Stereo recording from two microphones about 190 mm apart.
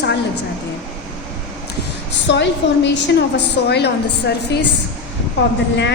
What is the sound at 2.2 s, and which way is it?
A woman's voice, 65° left (ahead or behind).